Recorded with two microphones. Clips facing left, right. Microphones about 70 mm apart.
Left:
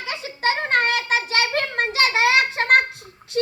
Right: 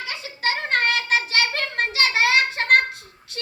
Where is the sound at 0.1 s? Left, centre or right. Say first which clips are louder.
Left 4 dB; left.